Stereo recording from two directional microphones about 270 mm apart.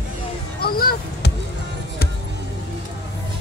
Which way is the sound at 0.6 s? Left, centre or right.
Left.